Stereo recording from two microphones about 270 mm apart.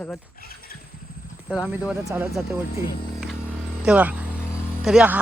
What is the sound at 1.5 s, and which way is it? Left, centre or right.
Speech, centre.